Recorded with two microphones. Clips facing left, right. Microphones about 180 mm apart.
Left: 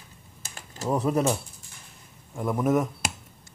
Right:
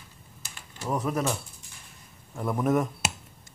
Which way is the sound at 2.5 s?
5° left (ahead or behind).